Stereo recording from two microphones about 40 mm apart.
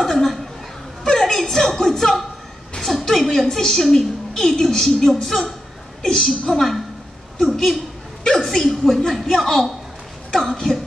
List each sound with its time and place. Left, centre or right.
0.0 s chuckle: centre
1.0 s chuckle: centre
2.8 s a woman's voice: centre
6.0 s a woman's voice: centre